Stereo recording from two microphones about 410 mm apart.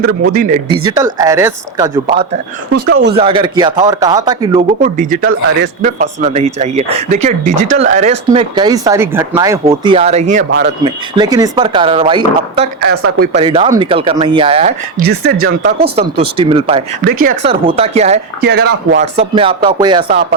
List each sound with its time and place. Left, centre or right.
0.3 s speech: right
0.9 s speech: centre
2.8 s speech: right
3.2 s speech: centre
7.5 s speech: right
7.8 s speech: centre
11.2 s speech: centre
12.8 s speech: right
13.2 s speech: centre